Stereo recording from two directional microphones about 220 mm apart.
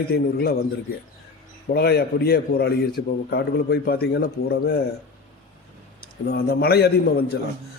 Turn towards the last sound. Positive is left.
turn(degrees=45)  # may be behind; listen again after turning